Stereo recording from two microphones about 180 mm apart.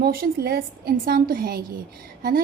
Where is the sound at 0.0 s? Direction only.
55° right (ahead or behind).